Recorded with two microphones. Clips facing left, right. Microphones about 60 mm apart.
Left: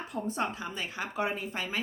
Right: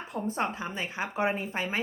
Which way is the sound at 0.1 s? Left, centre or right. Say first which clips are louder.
Right 2 dB; right.